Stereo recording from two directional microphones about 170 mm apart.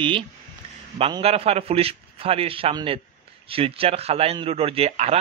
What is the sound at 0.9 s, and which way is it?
A man's voice, 35° right (ahead or behind).